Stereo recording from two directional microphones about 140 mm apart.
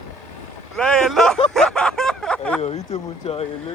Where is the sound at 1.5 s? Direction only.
5° left (ahead or behind).